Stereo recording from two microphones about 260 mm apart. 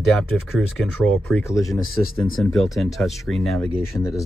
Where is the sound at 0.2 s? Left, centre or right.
Centre.